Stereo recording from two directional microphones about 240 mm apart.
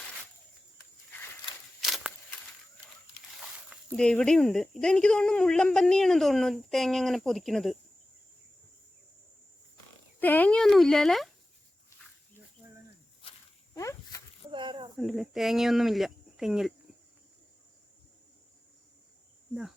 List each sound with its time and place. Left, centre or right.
1.8 s a sound: centre
3.3 s speech: centre
10.2 s speech: centre
13.7 s dog: centre
14.5 s snake: centre
14.9 s speech: centre